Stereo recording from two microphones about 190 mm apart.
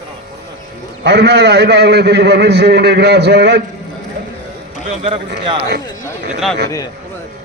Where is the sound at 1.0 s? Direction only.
60° right (ahead or behind).